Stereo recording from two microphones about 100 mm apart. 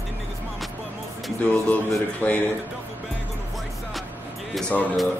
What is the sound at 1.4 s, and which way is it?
Speech, 15° left (ahead or behind).